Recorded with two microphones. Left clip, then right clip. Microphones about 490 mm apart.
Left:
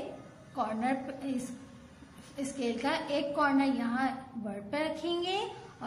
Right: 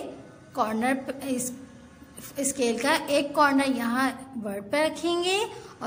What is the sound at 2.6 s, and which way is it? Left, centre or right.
A woman's voice, left.